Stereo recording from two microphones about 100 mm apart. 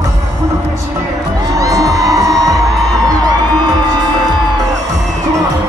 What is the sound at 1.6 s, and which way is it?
Music, 40° right (ahead or behind).